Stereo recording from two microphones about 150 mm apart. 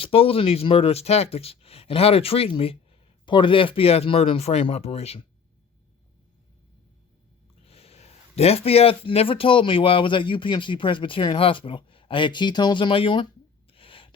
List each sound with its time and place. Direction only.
0.0 s speech: 40° left (ahead or behind)
7.6 s speech: 40° left (ahead or behind)
13.7 s a sound: 35° left (ahead or behind)